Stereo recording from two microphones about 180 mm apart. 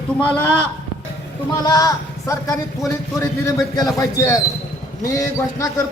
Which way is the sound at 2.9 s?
15° left (ahead or behind).